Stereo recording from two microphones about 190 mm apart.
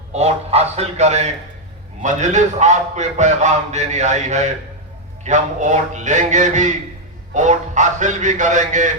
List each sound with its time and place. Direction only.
0.1 s a man's voice: 35° right (ahead or behind)